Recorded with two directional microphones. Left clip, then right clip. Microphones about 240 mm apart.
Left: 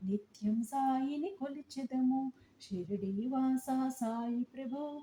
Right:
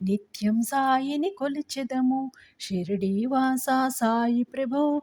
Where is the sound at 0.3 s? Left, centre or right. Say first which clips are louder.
Right 10 dB; right.